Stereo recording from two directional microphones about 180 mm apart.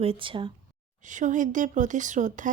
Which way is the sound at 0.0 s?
30° right (ahead or behind).